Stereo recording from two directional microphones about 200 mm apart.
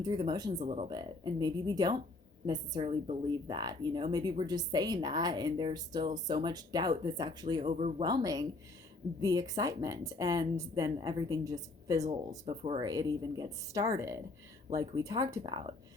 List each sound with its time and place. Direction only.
0.0 s a woman's voice: 20° right (ahead or behind)
7.7 s speech: 35° right (ahead or behind)
8.0 s a woman's voice: 20° right (ahead or behind)
12.5 s a woman's voice: 30° right (ahead or behind)
12.8 s a woman's voice: 20° right (ahead or behind)